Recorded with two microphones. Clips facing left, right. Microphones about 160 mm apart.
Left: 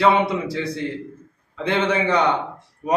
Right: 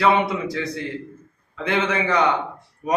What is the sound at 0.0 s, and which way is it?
Speech, 25° left (ahead or behind).